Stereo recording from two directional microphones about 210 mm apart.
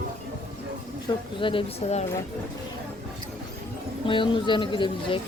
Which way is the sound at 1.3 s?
25° left (ahead or behind).